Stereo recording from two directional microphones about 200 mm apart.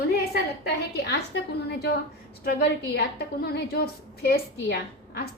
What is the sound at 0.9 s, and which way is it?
Speech, 55° left (ahead or behind).